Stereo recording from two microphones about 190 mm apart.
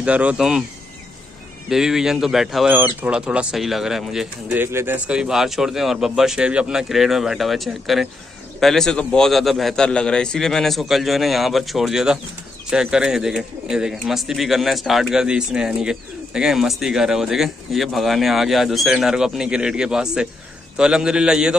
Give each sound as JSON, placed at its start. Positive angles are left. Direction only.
{"t": 0.0, "sound": "speech", "side_deg": -5}
{"t": 1.7, "sound": "speech", "side_deg": -5}